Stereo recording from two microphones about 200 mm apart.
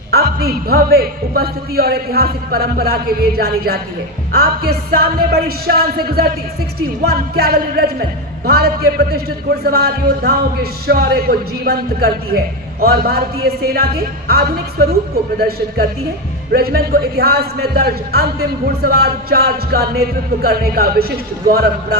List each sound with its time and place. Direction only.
0.1 s a man's voice: 50° right (ahead or behind)